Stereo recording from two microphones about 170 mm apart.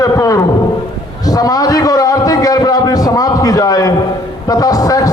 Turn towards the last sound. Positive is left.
turn(degrees=20)  # may be behind; listen again after turning